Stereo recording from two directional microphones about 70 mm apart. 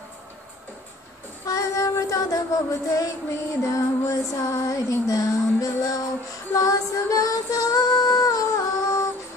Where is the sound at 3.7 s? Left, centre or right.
Left.